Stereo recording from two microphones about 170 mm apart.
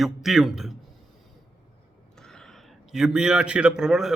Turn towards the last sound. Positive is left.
turn(degrees=-5)  # may be behind; listen again after turning